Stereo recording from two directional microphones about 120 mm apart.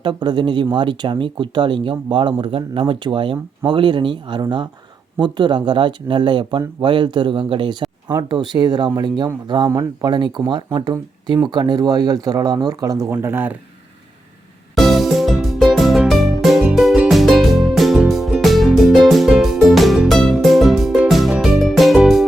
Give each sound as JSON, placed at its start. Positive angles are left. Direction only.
{"t": 0.0, "sound": "speech", "side_deg": -40}
{"t": 13.1, "sound": "speech", "side_deg": -20}
{"t": 14.8, "sound": "music", "side_deg": 0}